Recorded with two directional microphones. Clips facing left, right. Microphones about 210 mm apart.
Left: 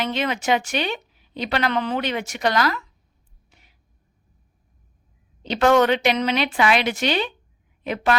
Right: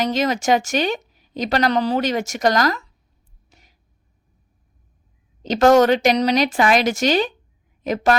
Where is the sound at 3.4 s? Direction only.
40° right (ahead or behind).